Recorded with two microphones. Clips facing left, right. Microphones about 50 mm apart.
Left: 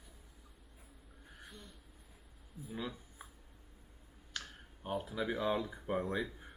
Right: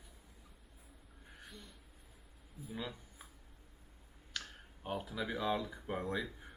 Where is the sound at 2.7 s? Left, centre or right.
Centre.